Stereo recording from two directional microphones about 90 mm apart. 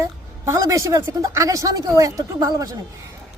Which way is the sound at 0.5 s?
35° right (ahead or behind).